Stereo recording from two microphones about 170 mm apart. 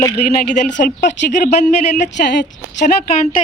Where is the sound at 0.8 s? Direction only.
55° left (ahead or behind).